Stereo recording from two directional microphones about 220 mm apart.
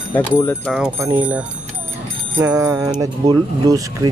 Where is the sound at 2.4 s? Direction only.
15° right (ahead or behind).